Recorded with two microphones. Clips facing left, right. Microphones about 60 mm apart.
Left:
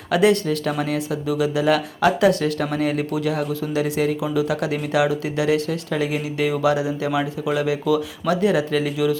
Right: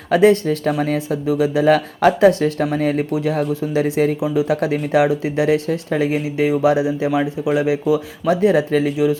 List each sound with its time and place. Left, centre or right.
0.1 s speech: right